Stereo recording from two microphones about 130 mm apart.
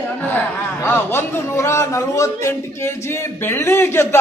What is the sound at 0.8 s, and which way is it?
A man's voice, 15° left (ahead or behind).